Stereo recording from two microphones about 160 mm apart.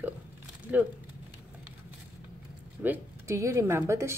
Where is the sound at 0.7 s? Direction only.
10° right (ahead or behind).